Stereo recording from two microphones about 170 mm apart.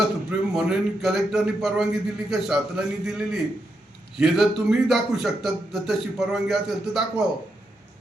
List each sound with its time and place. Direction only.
0.3 s a man's voice: 5° right (ahead or behind)